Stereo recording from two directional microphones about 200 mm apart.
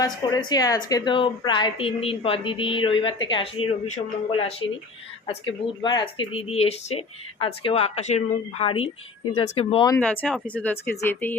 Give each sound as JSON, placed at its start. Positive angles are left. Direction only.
{"t": 0.0, "sound": "a woman's voice", "side_deg": 20}
{"t": 5.8, "sound": "a woman's voice", "side_deg": 25}
{"t": 10.0, "sound": "speech", "side_deg": 5}